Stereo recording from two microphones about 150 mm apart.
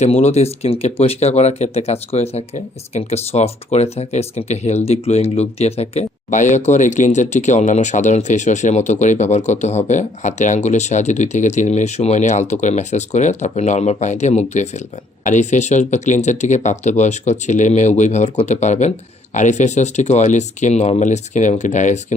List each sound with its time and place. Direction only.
0.0 s speech: 45° left (ahead or behind)